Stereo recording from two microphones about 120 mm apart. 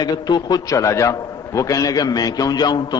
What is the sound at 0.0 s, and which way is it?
A man's voice, 35° left (ahead or behind).